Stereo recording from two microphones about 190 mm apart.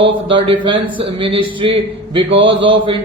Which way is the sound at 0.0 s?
25° right (ahead or behind).